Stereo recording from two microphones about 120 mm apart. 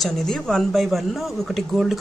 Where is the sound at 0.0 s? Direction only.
5° left (ahead or behind).